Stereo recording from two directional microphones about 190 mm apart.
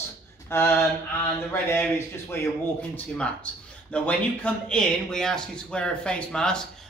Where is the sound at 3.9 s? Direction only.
5° left (ahead or behind).